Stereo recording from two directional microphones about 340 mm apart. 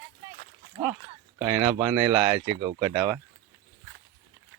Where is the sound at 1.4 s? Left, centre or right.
Centre.